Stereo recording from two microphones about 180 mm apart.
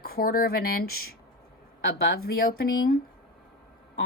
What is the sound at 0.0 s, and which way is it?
Speech, 55° left (ahead or behind).